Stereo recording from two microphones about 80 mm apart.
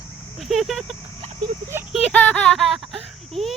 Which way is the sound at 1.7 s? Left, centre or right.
Right.